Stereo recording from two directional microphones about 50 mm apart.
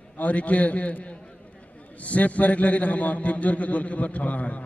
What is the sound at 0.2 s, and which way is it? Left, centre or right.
A man's voice, left.